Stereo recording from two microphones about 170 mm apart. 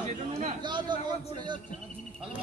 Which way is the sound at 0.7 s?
25° right (ahead or behind).